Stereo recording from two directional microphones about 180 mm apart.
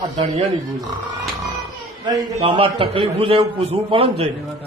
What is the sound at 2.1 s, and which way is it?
A man's voice, 30° right (ahead or behind).